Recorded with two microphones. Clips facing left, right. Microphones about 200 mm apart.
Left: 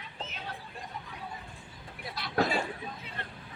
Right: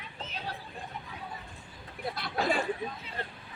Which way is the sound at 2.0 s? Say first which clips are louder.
Right 5 dB; 50° right (ahead or behind).